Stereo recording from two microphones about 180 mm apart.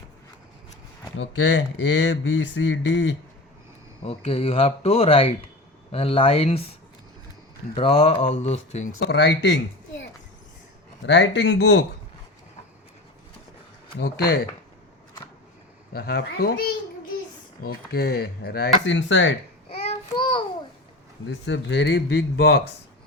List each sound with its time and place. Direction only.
1.1 s speech: 90° left
4.0 s speech: 30° left (ahead or behind)
7.8 s speech: 30° left (ahead or behind)
9.0 s speech: 75° left (ahead or behind)
11.0 s speech: 80° left
14.0 s speech: 65° left (ahead or behind)
16.0 s speech: 60° left (ahead or behind); by 19.4 s 90° left
19.7 s child singing: 30° left (ahead or behind)
21.2 s speech: 80° left; by 22.7 s 65° left (ahead or behind)